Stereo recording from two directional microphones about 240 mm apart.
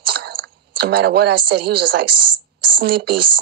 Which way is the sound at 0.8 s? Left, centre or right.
Right.